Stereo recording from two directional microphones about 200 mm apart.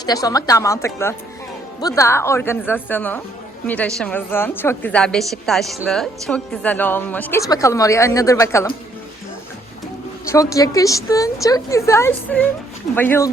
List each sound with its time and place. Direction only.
0.0 s a woman's voice: 20° left (ahead or behind)
10.2 s a woman's voice: 15° left (ahead or behind)